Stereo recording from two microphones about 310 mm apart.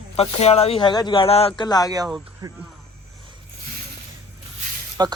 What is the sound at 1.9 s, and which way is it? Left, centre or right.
Speech, centre.